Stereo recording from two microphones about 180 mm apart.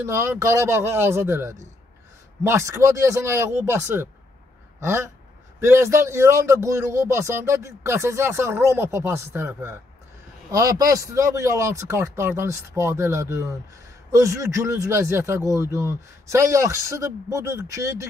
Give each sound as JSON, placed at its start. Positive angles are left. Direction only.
{"t": 0.0, "sound": "speech", "side_deg": -15}